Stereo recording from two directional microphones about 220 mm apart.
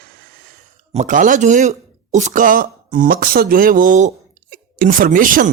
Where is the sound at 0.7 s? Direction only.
30° right (ahead or behind).